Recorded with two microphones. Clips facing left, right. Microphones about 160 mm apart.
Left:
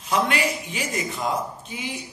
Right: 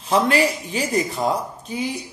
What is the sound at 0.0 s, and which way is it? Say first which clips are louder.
A man's voice: right 5 dB; 30° right (ahead or behind).